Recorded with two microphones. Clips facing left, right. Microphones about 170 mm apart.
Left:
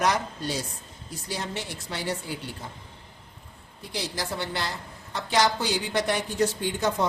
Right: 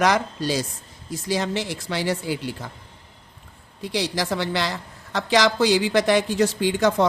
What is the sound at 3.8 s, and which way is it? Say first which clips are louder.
A woman's voice: right 7 dB; 90° right.